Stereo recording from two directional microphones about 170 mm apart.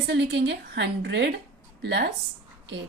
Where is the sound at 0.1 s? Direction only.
90° right.